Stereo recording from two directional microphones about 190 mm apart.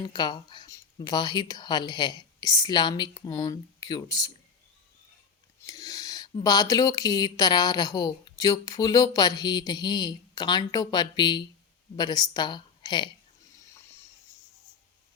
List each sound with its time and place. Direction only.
0.0 s a woman's voice: 20° left (ahead or behind)
5.6 s a sound: 20° left (ahead or behind)
6.4 s a woman's voice: 20° left (ahead or behind)